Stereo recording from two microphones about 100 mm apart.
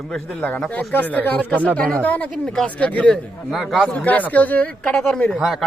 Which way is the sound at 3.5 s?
Centre (ahead or behind).